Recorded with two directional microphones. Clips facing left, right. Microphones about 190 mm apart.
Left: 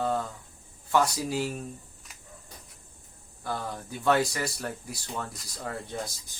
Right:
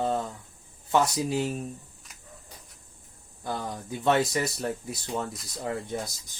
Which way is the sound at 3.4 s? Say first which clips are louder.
Right 1 dB; 20° right (ahead or behind).